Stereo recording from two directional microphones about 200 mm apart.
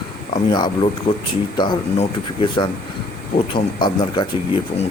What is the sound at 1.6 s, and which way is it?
Speech, 25° left (ahead or behind).